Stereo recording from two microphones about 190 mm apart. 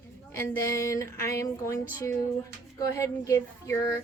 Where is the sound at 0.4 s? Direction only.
15° left (ahead or behind).